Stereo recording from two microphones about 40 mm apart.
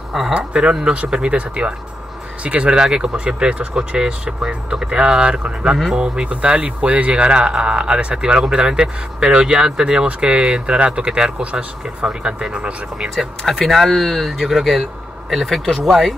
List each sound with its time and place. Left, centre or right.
0.5 s speech: right
13.5 s speech: centre